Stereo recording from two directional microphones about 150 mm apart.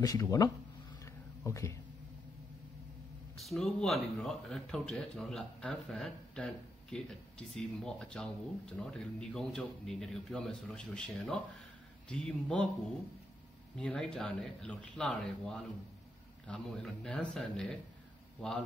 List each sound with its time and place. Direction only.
0.0 s speech: 25° left (ahead or behind)
1.0 s a sound: 20° left (ahead or behind)
3.3 s speech: centre (ahead or behind)
13.7 s speech: 5° left (ahead or behind)